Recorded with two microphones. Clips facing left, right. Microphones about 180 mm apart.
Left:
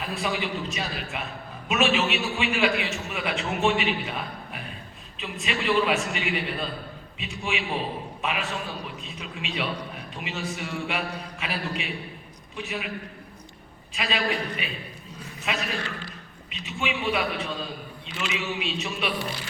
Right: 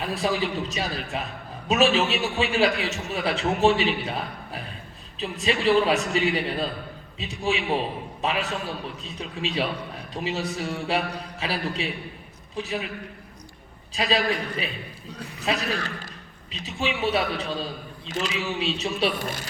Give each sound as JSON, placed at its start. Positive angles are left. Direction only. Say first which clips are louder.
{"t": 0.0, "sound": "a man's voice", "louder": "right 4 dB", "side_deg": -35}
{"t": 13.9, "sound": "a man's voice", "louder": "right 3 dB", "side_deg": -35}
{"t": 19.2, "sound": "speech", "louder": "right 1 dB", "side_deg": -45}